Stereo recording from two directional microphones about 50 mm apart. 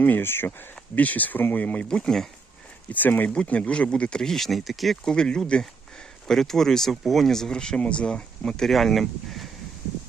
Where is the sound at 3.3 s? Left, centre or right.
Left; by 4.9 s centre.